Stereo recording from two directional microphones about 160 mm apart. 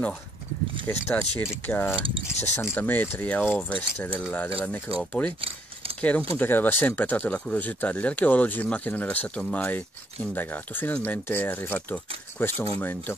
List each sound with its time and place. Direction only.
0.8 s speech: 15° left (ahead or behind)